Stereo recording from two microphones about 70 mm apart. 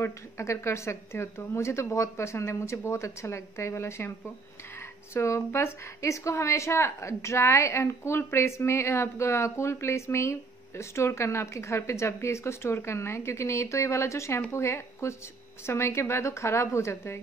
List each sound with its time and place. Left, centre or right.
0.0 s a woman's voice: left
5.1 s a woman's voice: left